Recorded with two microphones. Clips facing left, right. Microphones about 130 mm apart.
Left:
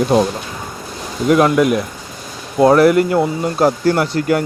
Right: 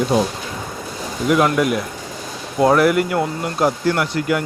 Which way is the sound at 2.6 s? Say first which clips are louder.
Left 4 dB; 30° left (ahead or behind).